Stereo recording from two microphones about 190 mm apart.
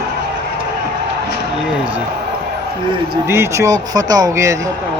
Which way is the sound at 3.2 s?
15° right (ahead or behind).